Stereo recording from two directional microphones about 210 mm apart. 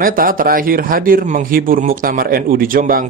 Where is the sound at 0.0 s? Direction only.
45° right (ahead or behind).